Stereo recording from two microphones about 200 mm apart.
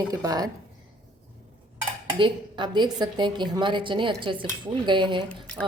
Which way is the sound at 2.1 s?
25° right (ahead or behind).